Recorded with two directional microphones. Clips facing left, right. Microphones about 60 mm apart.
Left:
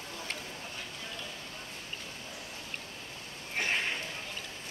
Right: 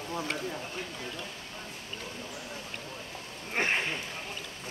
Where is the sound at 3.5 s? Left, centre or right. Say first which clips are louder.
Right 3 dB; right.